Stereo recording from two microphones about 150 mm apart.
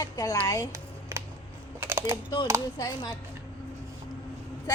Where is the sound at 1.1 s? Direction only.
15° right (ahead or behind).